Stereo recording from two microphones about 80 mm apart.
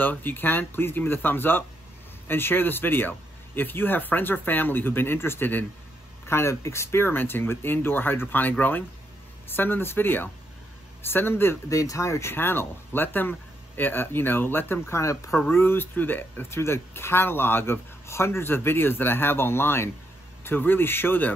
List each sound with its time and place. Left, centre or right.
0.0 s speech: left
11.7 s speech: left
15.5 s speech: left